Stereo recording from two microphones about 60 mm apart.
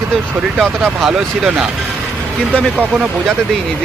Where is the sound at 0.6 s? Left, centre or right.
Centre.